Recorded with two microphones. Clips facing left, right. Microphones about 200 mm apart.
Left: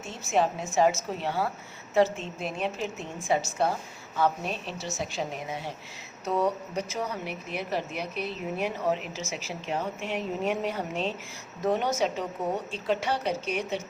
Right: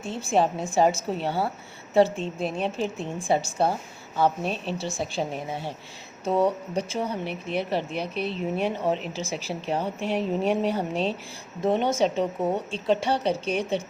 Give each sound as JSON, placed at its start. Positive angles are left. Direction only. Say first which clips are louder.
{"t": 0.0, "sound": "a woman's voice", "louder": "right 3 dB", "side_deg": -30}
{"t": 4.4, "sound": "a woman's voice", "louder": "right 4 dB", "side_deg": 0}
{"t": 4.8, "sound": "a woman's voice", "louder": "right 4 dB", "side_deg": -30}